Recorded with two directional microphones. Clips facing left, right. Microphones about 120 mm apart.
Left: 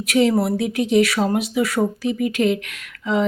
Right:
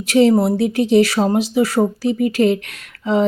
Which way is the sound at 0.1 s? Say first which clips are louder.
Right 4 dB; 30° right (ahead or behind).